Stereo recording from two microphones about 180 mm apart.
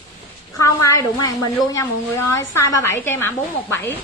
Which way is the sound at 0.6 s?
20° left (ahead or behind).